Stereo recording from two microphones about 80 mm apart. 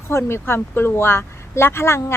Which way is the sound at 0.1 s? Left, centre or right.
Left.